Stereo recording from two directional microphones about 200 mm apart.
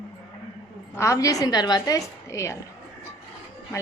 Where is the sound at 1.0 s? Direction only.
15° left (ahead or behind).